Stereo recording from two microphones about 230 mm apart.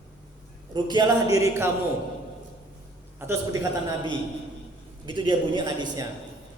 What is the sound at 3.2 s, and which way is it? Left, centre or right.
Speech, centre.